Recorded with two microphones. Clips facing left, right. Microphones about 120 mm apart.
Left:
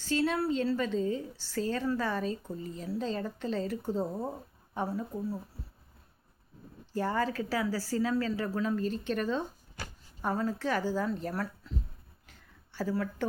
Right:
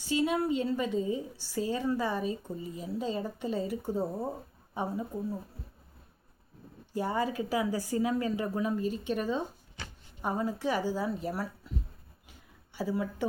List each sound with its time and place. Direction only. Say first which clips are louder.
0.0 s a woman's voice: right 1 dB; 15° right (ahead or behind)
6.9 s a woman's voice: even; 15° right (ahead or behind)
12.3 s a sound: right 1 dB; 15° right (ahead or behind)